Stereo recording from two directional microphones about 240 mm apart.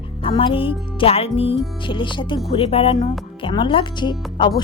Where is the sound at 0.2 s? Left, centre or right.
Left.